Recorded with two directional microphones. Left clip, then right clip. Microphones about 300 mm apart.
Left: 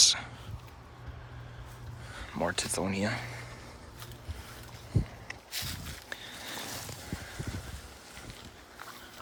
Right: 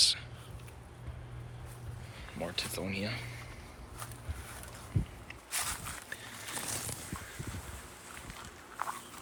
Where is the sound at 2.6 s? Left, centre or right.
Centre.